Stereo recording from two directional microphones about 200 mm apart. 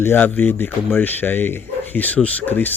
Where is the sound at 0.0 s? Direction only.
10° left (ahead or behind).